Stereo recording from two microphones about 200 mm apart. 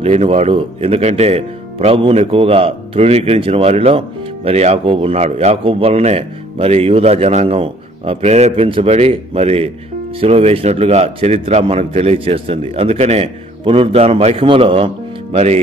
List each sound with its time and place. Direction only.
0.0 s a man's voice: 30° right (ahead or behind)